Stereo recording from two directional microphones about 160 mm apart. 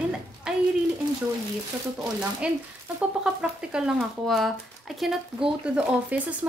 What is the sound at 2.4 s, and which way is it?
A woman's voice, 5° right (ahead or behind).